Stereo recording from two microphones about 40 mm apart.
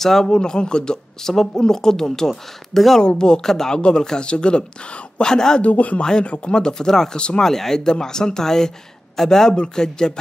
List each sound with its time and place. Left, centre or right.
0.0 s speech: centre
3.0 s speech: left
5.6 s speech: left
6.0 s speech: left
7.2 s speech: left
7.4 s speech: centre